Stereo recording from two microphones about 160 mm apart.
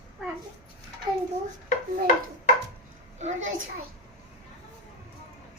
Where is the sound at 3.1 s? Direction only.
45° right (ahead or behind).